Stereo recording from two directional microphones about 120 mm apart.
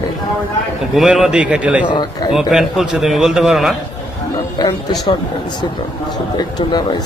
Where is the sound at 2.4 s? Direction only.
5° right (ahead or behind).